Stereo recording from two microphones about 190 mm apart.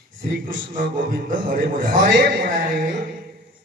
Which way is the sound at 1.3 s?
45° right (ahead or behind).